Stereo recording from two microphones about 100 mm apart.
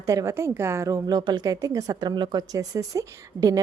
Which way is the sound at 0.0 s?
30° right (ahead or behind).